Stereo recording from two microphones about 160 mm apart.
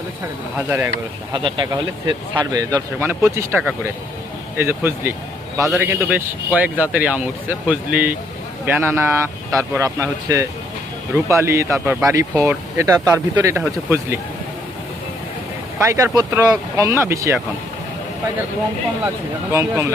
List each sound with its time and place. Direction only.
0.5 s speech: 15° right (ahead or behind)
1.3 s speech: 30° right (ahead or behind)
15.9 s speech: 20° right (ahead or behind)
19.0 s speech: 15° right (ahead or behind)